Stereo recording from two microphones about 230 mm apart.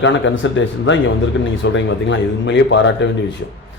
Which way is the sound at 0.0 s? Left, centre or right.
Left.